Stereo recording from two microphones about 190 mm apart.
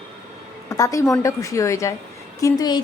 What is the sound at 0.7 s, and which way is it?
A woman's voice, 15° left (ahead or behind).